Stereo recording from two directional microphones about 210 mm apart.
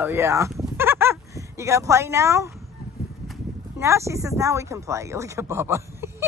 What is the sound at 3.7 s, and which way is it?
Speech, 15° right (ahead or behind).